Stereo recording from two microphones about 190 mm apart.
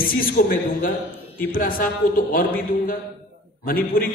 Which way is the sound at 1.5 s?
50° left (ahead or behind).